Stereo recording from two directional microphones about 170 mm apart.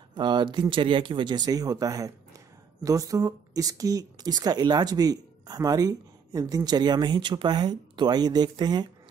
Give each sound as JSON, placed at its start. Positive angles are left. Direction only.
{"t": 0.1, "sound": "speech", "side_deg": -25}